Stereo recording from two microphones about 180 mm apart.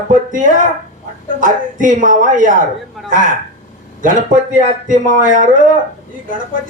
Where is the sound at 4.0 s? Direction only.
45° right (ahead or behind).